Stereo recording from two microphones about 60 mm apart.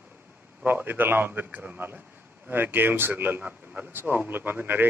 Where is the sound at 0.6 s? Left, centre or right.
Right.